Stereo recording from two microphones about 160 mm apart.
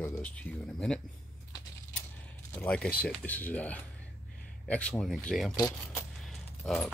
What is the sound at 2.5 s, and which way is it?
Speech, 10° left (ahead or behind).